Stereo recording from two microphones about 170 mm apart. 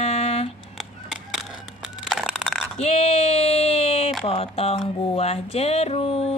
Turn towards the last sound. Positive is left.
turn(degrees=35)  # may be behind; listen again after turning